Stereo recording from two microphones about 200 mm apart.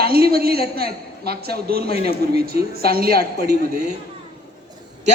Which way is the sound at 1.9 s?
30° left (ahead or behind).